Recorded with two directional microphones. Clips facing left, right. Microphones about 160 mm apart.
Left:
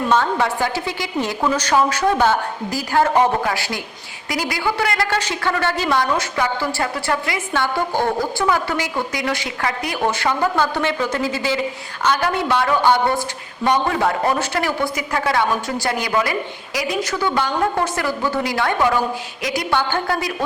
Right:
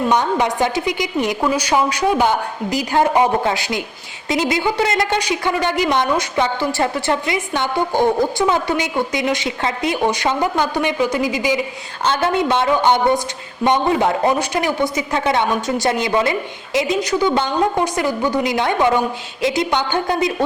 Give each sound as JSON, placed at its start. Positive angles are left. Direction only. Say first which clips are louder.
{"t": 0.1, "sound": "a woman's voice", "louder": "right 1 dB", "side_deg": -15}
{"t": 12.0, "sound": "speech", "louder": "right 2 dB", "side_deg": -25}